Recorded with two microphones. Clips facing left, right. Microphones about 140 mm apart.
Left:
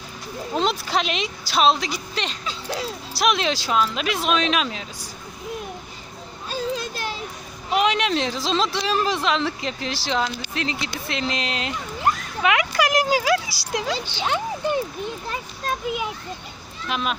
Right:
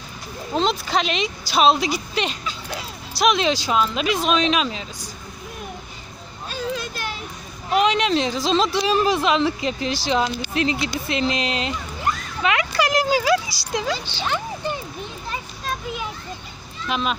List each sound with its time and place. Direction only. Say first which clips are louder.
0.5 s speech: right 2 dB; 5° left (ahead or behind)
6.5 s children playing: left 1 dB; 35° left (ahead or behind)
7.8 s speech: right 2 dB; 5° left (ahead or behind)
12.4 s a sound: even; 15° left (ahead or behind)
14.0 s speech: left 1 dB; 15° left (ahead or behind)
16.9 s speech: right 2 dB; 5° left (ahead or behind)